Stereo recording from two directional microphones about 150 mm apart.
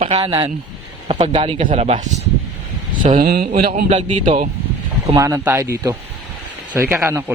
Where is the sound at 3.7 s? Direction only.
50° right (ahead or behind).